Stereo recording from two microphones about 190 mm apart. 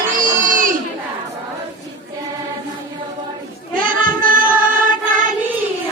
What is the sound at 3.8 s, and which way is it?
Child singing, 45° right (ahead or behind).